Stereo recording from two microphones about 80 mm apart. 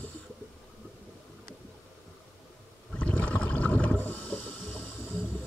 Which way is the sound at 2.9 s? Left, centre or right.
Centre.